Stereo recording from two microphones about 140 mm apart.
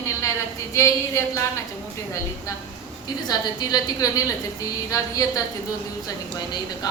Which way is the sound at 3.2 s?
30° left (ahead or behind).